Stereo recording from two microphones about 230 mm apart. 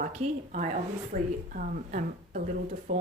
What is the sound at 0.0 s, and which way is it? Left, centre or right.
Speech, right.